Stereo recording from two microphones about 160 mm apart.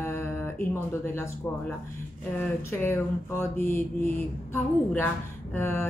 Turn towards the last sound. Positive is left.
turn(degrees=15)  # may be behind; listen again after turning